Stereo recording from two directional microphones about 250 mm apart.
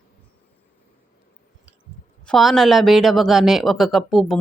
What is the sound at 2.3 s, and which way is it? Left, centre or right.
Speech, centre.